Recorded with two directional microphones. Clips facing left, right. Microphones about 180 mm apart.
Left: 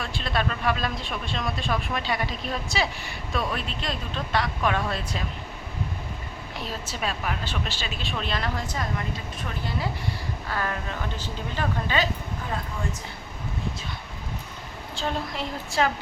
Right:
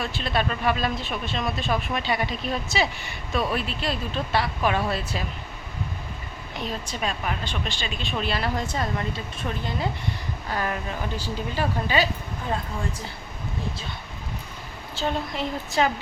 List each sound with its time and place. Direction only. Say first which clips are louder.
0.0 s speech: right 2 dB; centre (ahead or behind)
6.6 s speech: right 2 dB; 5° left (ahead or behind)
8.5 s a woman's voice: right 3 dB; 25° right (ahead or behind); by 12.0 s 10° right (ahead or behind)
14.9 s speech: right 2 dB; centre (ahead or behind)